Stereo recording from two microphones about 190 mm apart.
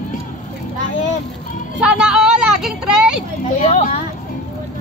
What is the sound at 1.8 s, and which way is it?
Speech, 5° right (ahead or behind).